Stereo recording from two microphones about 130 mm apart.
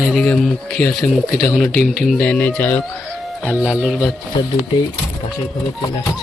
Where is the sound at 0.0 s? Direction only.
Centre (ahead or behind).